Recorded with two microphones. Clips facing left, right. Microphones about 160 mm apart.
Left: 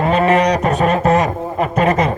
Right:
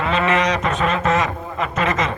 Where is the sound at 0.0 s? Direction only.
45° left (ahead or behind).